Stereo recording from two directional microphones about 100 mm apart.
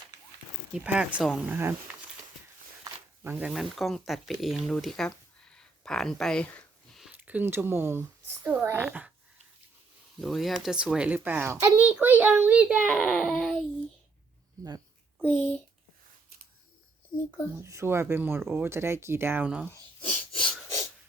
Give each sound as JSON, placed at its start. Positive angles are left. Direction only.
{"t": 0.8, "sound": "speech", "side_deg": -15}
{"t": 3.2, "sound": "speech", "side_deg": -20}
{"t": 3.5, "sound": "speech", "side_deg": 0}
{"t": 7.1, "sound": "speech", "side_deg": -15}
{"t": 10.2, "sound": "speech", "side_deg": 0}
{"t": 12.8, "sound": "a child's voice", "side_deg": 5}
{"t": 13.4, "sound": "a child's voice", "side_deg": 0}
{"t": 15.2, "sound": "a child's voice", "side_deg": 15}
{"t": 17.6, "sound": "speech", "side_deg": -30}
{"t": 20.0, "sound": "wheeze", "side_deg": 60}